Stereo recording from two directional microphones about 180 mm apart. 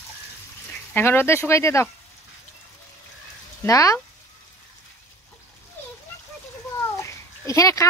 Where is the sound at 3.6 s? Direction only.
15° left (ahead or behind).